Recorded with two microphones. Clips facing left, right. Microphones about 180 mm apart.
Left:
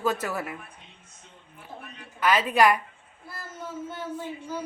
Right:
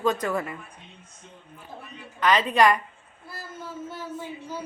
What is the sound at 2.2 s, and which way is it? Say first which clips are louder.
Speech: right 1 dB; 5° left (ahead or behind).